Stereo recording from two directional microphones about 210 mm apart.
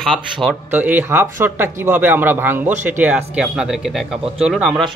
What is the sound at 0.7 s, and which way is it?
Speech, 10° right (ahead or behind).